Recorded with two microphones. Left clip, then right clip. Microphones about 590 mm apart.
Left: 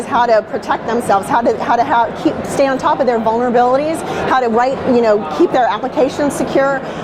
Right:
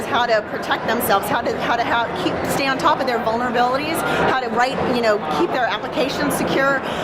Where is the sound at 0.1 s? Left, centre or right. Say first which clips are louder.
Left 6 dB; left.